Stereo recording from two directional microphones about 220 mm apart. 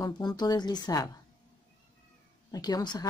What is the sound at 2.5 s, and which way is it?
Speech, 15° left (ahead or behind).